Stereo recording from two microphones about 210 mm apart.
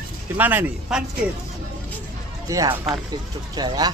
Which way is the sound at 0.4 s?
10° right (ahead or behind).